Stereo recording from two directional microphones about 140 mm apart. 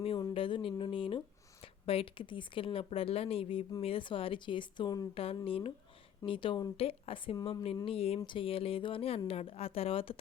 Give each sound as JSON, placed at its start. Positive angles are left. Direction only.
{"t": 0.3, "sound": "speech", "side_deg": 40}
{"t": 5.1, "sound": "speech", "side_deg": 45}